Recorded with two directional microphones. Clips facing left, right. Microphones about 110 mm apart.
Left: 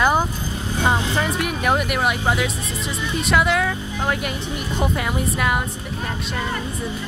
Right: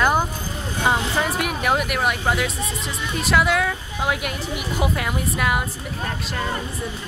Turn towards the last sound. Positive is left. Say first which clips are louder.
# left 1 dB
turn(degrees=0)  # may be behind; listen again after turning